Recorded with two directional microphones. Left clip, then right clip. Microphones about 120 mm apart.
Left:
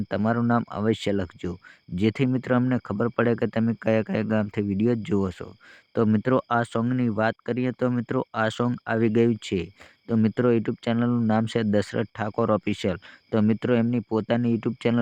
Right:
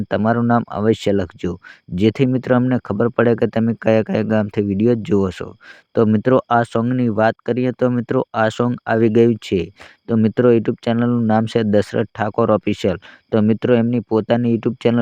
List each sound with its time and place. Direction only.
0.1 s speech: 35° right (ahead or behind)